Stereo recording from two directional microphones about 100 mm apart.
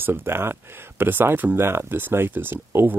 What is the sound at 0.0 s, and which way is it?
Speech, 20° right (ahead or behind).